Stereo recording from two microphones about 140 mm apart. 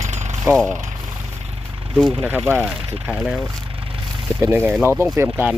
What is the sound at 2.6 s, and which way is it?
Speech, centre (ahead or behind).